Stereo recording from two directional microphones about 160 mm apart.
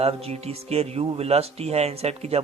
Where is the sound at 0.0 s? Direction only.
40° right (ahead or behind).